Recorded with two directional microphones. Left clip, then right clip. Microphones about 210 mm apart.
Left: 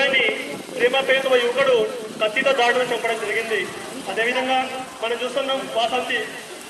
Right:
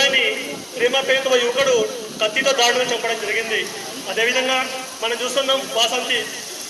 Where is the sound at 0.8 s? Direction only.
30° right (ahead or behind).